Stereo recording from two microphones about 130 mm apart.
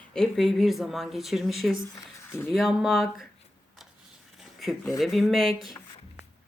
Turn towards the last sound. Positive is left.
turn(degrees=0)  # may be behind; listen again after turning